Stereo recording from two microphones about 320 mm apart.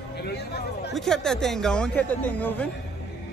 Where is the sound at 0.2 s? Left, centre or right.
Left.